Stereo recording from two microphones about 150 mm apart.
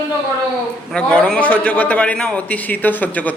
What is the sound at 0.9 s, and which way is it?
A man's voice, 5° left (ahead or behind).